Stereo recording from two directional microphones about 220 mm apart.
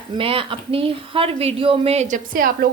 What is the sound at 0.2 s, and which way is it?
Speech, 25° right (ahead or behind).